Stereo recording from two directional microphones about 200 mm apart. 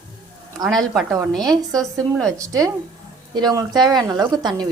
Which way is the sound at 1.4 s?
20° right (ahead or behind).